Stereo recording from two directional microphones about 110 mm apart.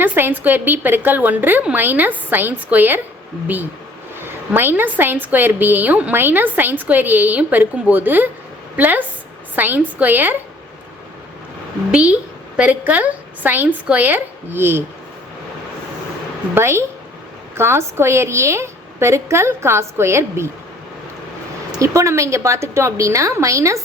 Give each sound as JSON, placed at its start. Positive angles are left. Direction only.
{"t": 0.0, "sound": "a woman's voice", "side_deg": -20}
{"t": 11.9, "sound": "a woman's voice", "side_deg": -10}
{"t": 16.6, "sound": "a woman's voice", "side_deg": -25}
{"t": 21.8, "sound": "a woman's voice", "side_deg": -25}